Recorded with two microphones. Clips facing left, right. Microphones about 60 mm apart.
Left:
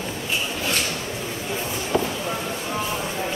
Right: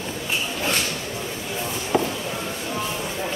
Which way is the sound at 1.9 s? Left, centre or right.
Right.